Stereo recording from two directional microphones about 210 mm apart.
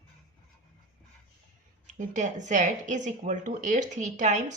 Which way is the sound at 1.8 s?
35° right (ahead or behind).